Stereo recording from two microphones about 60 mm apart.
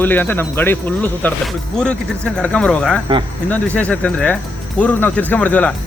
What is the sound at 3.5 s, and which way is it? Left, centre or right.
Speech, left.